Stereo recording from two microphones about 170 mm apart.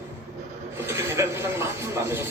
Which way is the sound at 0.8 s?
15° right (ahead or behind).